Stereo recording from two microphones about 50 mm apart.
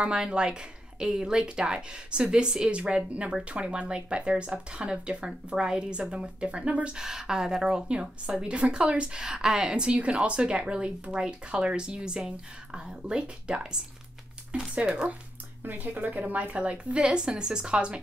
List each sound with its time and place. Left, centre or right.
0.0 s a woman's voice: right
14.8 s a woman's voice: right
15.6 s speech: right
16.5 s a woman's voice: right